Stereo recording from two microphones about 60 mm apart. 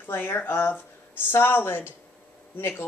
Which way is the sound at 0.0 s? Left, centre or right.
Left.